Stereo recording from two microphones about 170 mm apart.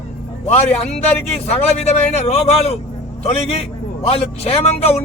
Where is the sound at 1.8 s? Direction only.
40° left (ahead or behind).